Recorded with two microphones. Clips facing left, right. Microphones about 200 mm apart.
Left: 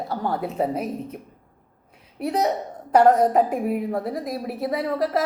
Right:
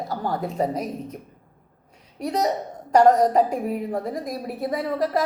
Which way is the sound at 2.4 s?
40° right (ahead or behind).